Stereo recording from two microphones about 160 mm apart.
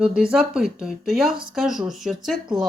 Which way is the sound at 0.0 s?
5° right (ahead or behind).